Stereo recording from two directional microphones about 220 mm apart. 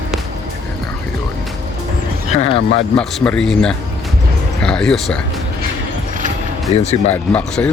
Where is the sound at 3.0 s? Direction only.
5° left (ahead or behind).